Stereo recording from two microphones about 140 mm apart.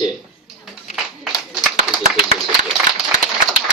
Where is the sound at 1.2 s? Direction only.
5° right (ahead or behind).